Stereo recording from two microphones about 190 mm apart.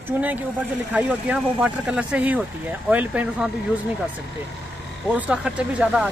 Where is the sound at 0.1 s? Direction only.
10° right (ahead or behind).